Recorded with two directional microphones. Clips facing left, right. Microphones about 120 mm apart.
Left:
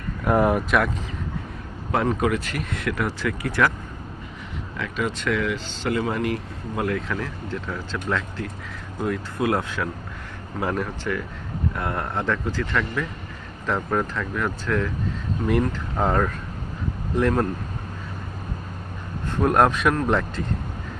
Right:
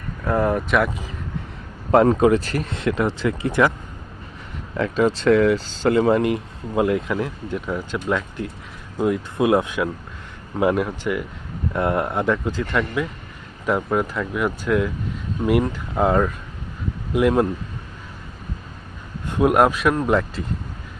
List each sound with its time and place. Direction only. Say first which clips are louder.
0.3 s a sound: left 1 dB; 15° left (ahead or behind)
1.9 s speech: right 8 dB; 35° right (ahead or behind); by 3.7 s 20° right (ahead or behind)
4.8 s speech: right 8 dB; 30° right (ahead or behind); by 17.5 s 15° right (ahead or behind)
19.3 s speech: right 2 dB; 10° right (ahead or behind)